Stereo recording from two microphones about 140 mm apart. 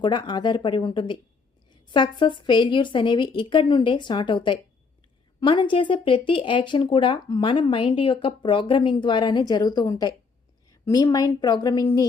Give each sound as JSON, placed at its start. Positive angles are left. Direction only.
{"t": 0.0, "sound": "a woman's voice", "side_deg": 35}